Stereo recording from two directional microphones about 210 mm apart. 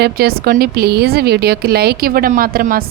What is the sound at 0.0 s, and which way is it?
A woman's voice, 50° right (ahead or behind).